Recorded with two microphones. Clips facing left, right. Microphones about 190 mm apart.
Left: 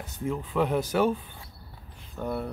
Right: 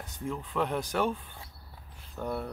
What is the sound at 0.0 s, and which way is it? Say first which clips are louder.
Speech: left 5 dB; 5° left (ahead or behind).